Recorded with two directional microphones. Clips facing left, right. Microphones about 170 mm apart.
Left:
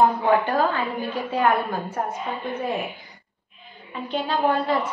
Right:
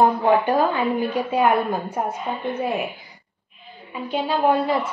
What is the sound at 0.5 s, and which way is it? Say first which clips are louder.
Speech: right 3 dB; 15° right (ahead or behind).